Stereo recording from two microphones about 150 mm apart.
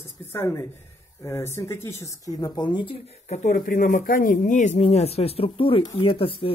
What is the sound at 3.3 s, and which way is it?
Speech, 50° left (ahead or behind).